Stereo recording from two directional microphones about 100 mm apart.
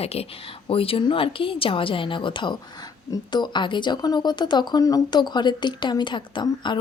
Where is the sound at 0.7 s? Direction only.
70° left (ahead or behind); by 2.5 s 55° left (ahead or behind).